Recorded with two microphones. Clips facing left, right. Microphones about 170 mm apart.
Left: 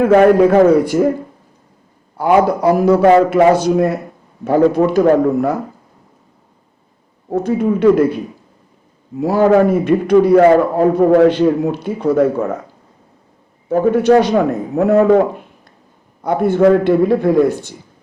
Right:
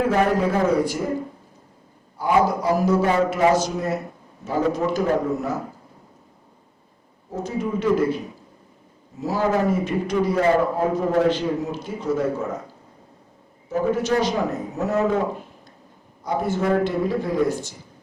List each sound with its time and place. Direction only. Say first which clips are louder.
0.0 s a man's voice: left 11 dB; 60° left (ahead or behind)
2.1 s a man's voice: left 7 dB; 65° left (ahead or behind)
7.3 s a man's voice: left 10 dB; 60° left (ahead or behind)
9.1 s a man's voice: left 10 dB; 60° left (ahead or behind)
13.7 s a man's voice: left 10 dB; 60° left (ahead or behind)